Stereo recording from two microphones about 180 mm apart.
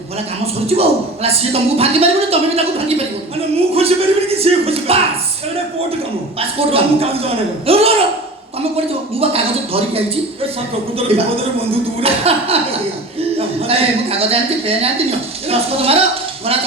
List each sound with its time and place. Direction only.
0.7 s speech: 35° right (ahead or behind)
6.6 s speech: 30° right (ahead or behind)
11.1 s speech: 30° right (ahead or behind)
13.7 s speech: 30° right (ahead or behind)